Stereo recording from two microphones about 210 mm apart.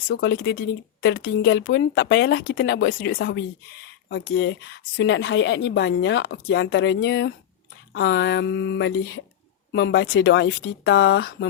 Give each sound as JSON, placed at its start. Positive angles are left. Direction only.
{"t": 0.1, "sound": "speech", "side_deg": 55}